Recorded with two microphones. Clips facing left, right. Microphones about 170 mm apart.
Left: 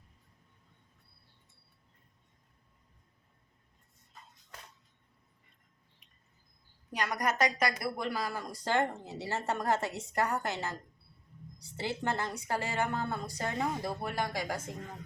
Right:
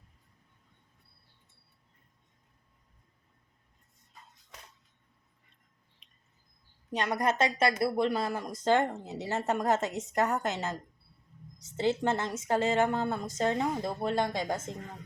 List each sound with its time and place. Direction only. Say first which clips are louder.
6.9 s a woman's voice: right 3 dB; 25° right (ahead or behind)